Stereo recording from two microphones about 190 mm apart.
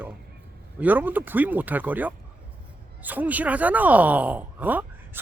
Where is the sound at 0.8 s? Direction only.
10° right (ahead or behind).